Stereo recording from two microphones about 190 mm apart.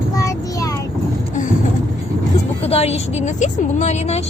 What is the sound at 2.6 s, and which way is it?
A woman's voice, 35° left (ahead or behind).